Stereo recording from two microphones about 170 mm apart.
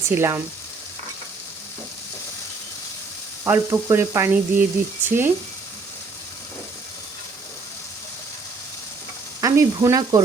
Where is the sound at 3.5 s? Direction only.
15° right (ahead or behind).